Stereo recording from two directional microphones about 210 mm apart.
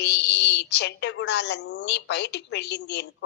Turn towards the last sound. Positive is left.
turn(degrees=55)  # may be behind; listen again after turning